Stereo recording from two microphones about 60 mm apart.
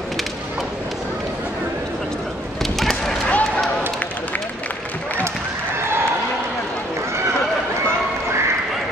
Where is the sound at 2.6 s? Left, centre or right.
Centre.